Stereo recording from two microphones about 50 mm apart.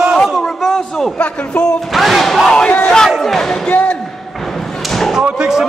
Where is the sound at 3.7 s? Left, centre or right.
Left.